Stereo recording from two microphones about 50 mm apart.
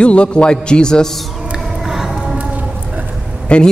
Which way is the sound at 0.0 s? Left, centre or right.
Left.